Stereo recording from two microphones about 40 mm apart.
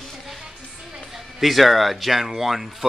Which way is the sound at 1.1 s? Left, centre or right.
Centre.